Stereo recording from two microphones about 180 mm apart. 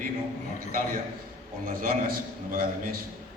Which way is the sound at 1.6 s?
50° right (ahead or behind).